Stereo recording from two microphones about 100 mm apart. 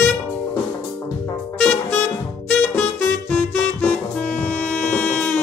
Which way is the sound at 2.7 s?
20° left (ahead or behind).